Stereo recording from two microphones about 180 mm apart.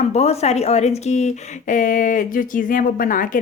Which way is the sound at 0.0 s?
35° left (ahead or behind).